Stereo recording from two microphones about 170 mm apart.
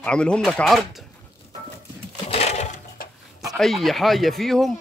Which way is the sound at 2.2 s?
40° left (ahead or behind).